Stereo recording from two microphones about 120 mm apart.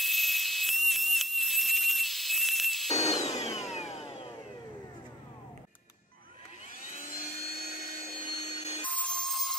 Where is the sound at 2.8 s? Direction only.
65° left (ahead or behind).